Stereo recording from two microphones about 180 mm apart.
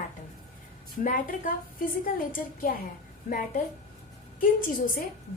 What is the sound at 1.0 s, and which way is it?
A woman's voice, 50° left (ahead or behind).